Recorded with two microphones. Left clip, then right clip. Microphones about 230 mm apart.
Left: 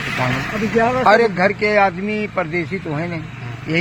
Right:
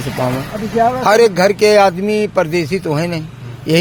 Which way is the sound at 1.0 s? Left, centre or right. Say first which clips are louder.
Right 4 dB; right.